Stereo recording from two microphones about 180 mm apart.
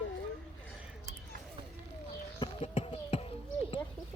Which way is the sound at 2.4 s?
30° left (ahead or behind).